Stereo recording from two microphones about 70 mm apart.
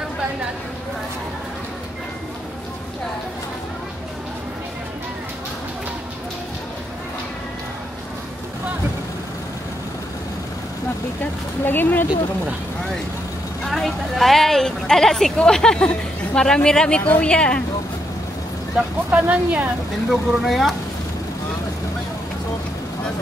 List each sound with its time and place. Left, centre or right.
11.6 s speech: left
13.7 s speech: centre
19.0 s speech: right
20.1 s speech: centre